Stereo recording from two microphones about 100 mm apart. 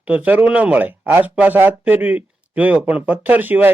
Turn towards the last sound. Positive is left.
turn(degrees=-20)  # may be behind; listen again after turning